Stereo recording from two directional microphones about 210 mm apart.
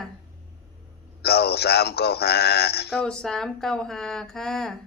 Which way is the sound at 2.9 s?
5° left (ahead or behind).